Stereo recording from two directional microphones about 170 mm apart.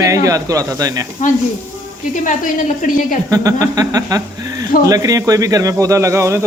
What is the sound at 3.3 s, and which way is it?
Speech, 20° right (ahead or behind).